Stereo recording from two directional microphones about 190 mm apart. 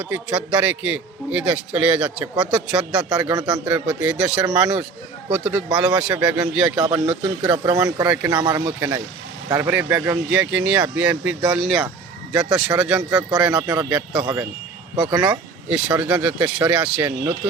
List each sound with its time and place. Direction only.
0.1 s a man's voice: 5° right (ahead or behind)
6.8 s speech: 20° right (ahead or behind)
7.1 s a man's voice: 5° right (ahead or behind)
7.5 s a man's voice: 20° right (ahead or behind); by 12.9 s centre (ahead or behind)
13.0 s a man's voice: 15° right (ahead or behind)
13.7 s speech: 5° right (ahead or behind)
14.2 s a man's voice: 20° right (ahead or behind)
15.3 s speech: 5° right (ahead or behind)